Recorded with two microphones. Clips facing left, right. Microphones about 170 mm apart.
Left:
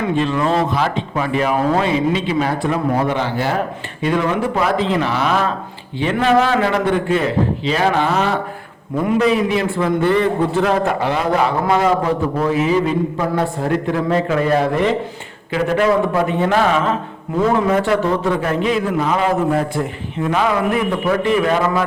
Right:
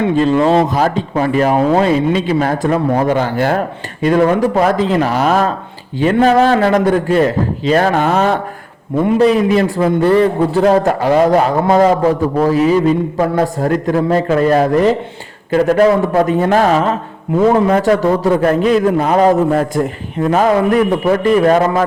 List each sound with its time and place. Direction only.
0.2 s a man's voice: 35° right (ahead or behind); by 8.4 s 50° right (ahead or behind)
9.1 s a man's voice: 40° right (ahead or behind)
17.8 s a man's voice: 45° right (ahead or behind)